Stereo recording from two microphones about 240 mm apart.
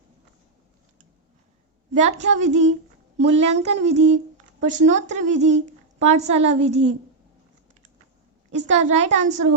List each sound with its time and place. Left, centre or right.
1.9 s a woman's voice: right
8.5 s speech: right